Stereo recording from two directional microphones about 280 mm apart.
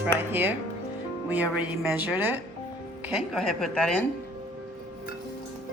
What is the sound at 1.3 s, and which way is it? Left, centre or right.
A woman's voice, centre.